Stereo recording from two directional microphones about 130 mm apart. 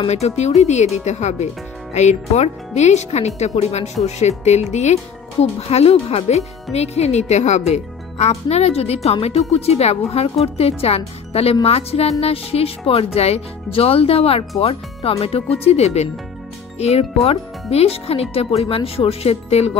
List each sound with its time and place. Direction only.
0.0 s speech: 55° left (ahead or behind)